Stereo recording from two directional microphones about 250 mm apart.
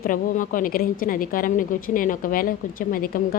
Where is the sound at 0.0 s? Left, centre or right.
Left.